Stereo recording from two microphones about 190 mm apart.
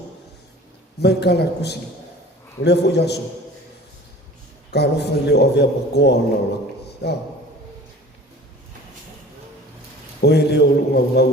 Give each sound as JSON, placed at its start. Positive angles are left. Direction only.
{"t": 0.9, "sound": "a man's voice", "side_deg": 60}
{"t": 4.7, "sound": "a man's voice", "side_deg": 60}
{"t": 10.2, "sound": "a man's voice", "side_deg": 60}